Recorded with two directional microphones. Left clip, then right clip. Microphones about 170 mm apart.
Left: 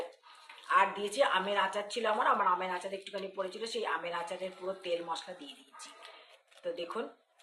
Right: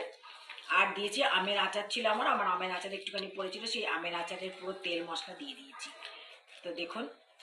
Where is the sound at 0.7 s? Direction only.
35° left (ahead or behind).